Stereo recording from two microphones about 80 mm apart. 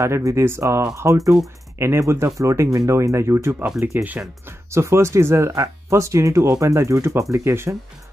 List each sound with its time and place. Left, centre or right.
0.0 s speech: right
3.8 s speech: right
4.5 s speech: right